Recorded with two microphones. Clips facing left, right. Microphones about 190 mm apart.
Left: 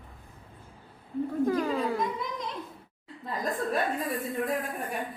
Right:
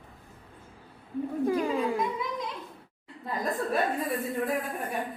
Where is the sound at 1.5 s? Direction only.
15° right (ahead or behind).